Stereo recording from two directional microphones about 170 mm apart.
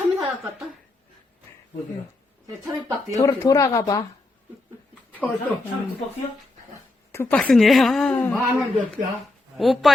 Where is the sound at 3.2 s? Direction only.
20° left (ahead or behind).